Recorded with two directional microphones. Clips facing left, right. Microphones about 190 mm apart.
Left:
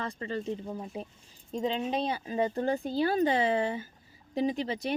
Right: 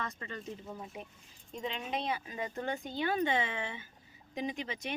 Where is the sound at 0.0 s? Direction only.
30° left (ahead or behind).